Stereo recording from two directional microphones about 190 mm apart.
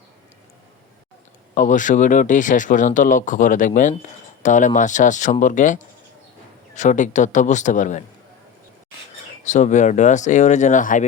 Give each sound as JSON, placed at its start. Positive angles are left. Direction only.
{"t": 1.5, "sound": "speech", "side_deg": 45}
{"t": 9.4, "sound": "speech", "side_deg": 40}